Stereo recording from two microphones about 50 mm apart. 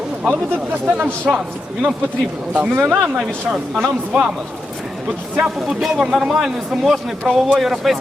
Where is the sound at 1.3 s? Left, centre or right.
Centre.